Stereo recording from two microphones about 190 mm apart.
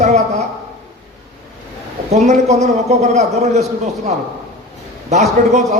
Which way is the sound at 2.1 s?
35° right (ahead or behind).